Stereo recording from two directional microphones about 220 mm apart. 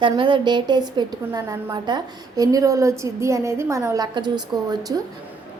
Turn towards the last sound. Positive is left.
turn(degrees=-15)  # may be behind; listen again after turning